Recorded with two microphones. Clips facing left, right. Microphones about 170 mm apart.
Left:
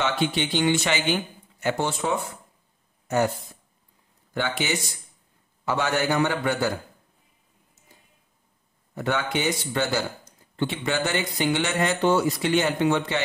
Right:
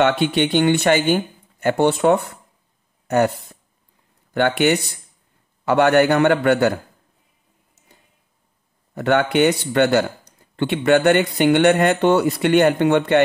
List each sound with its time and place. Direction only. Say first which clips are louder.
0.0 s speech: right 8 dB; 65° right (ahead or behind)
8.9 s speech: right 9 dB; 65° right (ahead or behind)